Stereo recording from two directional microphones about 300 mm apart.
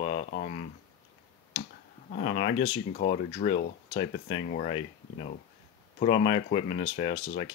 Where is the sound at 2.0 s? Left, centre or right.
Left.